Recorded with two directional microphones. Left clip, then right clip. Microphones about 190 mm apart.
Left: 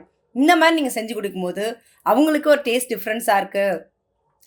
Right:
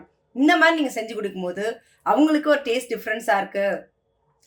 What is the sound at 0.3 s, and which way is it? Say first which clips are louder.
Speech: left 2 dB; 40° left (ahead or behind).